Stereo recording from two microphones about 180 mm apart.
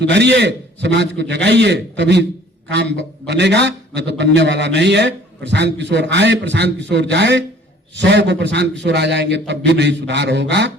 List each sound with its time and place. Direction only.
0.0 s a man's voice: 75° right (ahead or behind)